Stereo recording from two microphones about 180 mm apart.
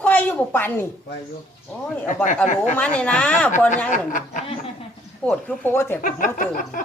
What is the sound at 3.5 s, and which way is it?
Speech, 45° left (ahead or behind).